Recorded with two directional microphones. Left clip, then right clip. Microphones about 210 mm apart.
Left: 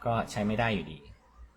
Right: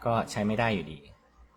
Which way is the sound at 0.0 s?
15° right (ahead or behind).